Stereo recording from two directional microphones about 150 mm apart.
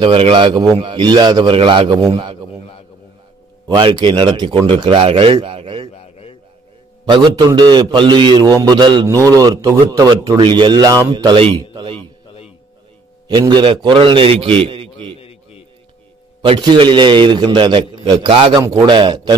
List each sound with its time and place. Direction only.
0.0 s a man's voice: 35° right (ahead or behind)
3.6 s a man's voice: 30° right (ahead or behind)
5.9 s a sound: 40° left (ahead or behind)
7.1 s a man's voice: 30° right (ahead or behind)
11.3 s a man's voice: 40° right (ahead or behind)
13.3 s a man's voice: 30° right (ahead or behind)
16.3 s a man's voice: 30° right (ahead or behind)
18.6 s a man's voice: 20° right (ahead or behind)